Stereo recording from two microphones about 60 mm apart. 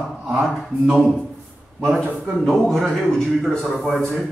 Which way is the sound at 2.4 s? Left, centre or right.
Centre.